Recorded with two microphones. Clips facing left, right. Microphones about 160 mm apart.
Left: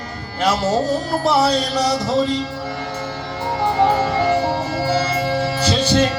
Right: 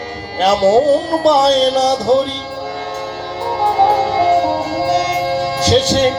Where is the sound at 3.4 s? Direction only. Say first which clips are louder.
Right 4 dB; 30° right (ahead or behind).